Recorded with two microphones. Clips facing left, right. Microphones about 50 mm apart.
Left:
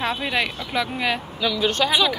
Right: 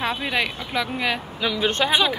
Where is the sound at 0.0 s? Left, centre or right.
Centre.